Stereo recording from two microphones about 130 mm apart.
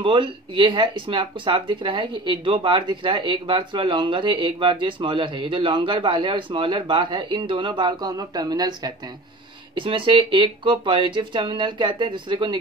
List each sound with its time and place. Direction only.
0.0 s speech: 40° right (ahead or behind)